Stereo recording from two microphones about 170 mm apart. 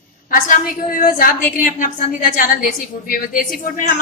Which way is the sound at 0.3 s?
55° left (ahead or behind).